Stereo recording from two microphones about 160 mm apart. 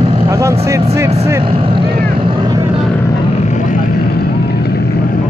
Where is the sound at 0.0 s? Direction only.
35° right (ahead or behind).